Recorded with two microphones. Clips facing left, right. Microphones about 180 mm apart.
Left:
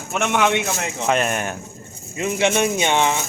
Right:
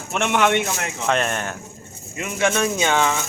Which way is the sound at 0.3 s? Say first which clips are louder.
Right 1 dB; 10° left (ahead or behind).